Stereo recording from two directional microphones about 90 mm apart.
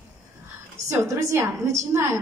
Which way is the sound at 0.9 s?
35° right (ahead or behind).